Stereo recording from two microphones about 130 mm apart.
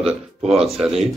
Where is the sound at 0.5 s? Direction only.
50° right (ahead or behind).